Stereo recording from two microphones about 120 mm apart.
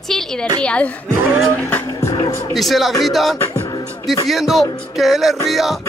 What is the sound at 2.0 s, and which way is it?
Music, 40° left (ahead or behind).